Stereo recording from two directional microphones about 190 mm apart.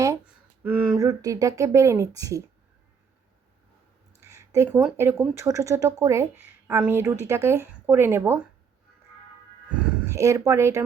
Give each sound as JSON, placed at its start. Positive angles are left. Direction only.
{"t": 0.6, "sound": "speech", "side_deg": -10}
{"t": 4.2, "sound": "speech", "side_deg": -15}
{"t": 10.1, "sound": "speech", "side_deg": -15}